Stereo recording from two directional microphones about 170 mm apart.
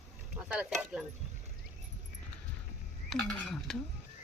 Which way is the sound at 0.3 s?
10° right (ahead or behind).